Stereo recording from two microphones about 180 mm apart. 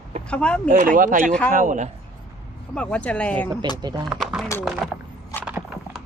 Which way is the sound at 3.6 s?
25° right (ahead or behind).